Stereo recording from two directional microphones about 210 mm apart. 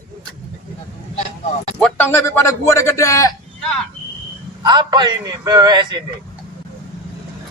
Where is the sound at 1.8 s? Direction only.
10° left (ahead or behind).